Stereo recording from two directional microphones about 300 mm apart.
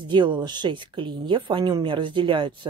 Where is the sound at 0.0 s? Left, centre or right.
Centre.